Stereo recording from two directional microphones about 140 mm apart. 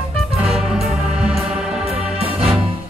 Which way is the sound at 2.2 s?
45° right (ahead or behind).